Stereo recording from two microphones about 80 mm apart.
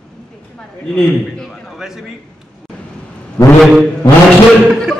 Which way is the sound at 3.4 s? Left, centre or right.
Left.